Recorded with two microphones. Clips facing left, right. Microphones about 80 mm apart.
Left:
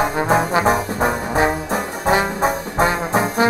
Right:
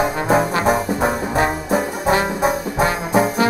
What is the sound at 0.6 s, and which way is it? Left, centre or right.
Brass instrument, centre.